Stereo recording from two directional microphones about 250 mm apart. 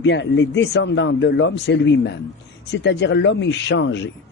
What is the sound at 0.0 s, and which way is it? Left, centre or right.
Speech, left.